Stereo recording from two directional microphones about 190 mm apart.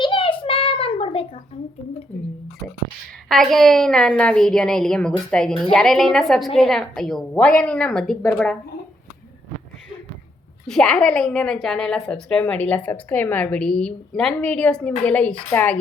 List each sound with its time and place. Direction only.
0.0 s a sound: 25° left (ahead or behind)
3.2 s a woman's voice: centre (ahead or behind)
10.7 s a woman's voice: 5° left (ahead or behind)